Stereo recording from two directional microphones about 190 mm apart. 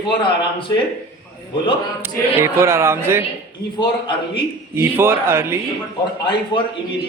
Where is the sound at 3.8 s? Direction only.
25° left (ahead or behind).